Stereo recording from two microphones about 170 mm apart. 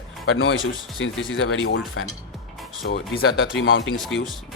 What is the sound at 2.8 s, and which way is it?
Speech, 75° left (ahead or behind).